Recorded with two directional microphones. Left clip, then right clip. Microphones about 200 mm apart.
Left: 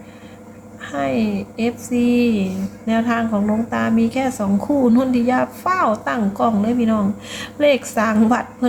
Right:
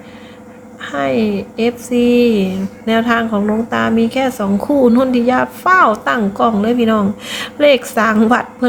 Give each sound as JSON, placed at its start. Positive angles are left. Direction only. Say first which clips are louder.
{"t": 0.8, "sound": "a woman's voice", "louder": "right 5 dB", "side_deg": -20}